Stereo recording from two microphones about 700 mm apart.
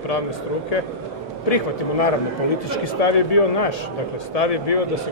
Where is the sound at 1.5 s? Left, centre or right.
Left.